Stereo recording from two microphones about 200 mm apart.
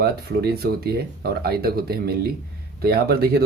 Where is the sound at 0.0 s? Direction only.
50° right (ahead or behind).